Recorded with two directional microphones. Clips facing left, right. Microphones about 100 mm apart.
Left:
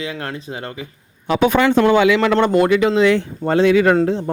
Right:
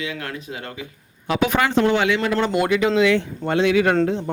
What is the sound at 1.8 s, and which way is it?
Speech, 80° left.